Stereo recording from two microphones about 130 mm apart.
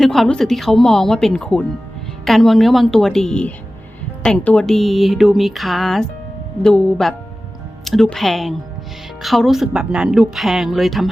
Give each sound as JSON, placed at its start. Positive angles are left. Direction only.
{"t": 0.0, "sound": "speech", "side_deg": 0}